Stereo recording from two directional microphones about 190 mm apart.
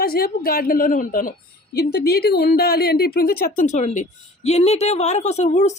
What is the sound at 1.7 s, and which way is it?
A woman's voice, 55° left (ahead or behind).